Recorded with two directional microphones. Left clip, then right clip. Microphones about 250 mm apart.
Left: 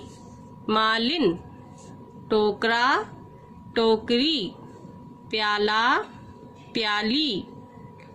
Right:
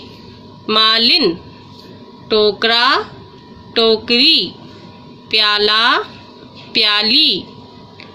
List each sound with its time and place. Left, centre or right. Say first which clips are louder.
0.7 s speech: right 11 dB; left
2.3 s speech: right 9 dB; left